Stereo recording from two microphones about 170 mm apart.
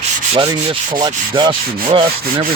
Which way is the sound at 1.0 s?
25° right (ahead or behind).